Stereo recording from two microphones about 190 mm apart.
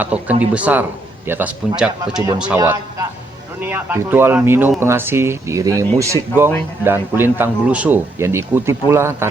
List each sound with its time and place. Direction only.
0.0 s speech: 10° right (ahead or behind)
2.6 s a man's voice: 20° right (ahead or behind)